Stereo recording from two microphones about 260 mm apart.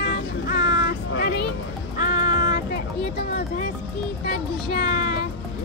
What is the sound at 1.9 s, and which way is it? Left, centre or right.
Child singing, left.